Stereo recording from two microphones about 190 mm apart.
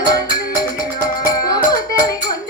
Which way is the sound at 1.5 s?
20° left (ahead or behind).